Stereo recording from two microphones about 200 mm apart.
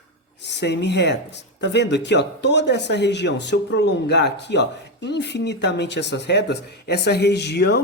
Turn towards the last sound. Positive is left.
turn(degrees=55)  # may be behind; listen again after turning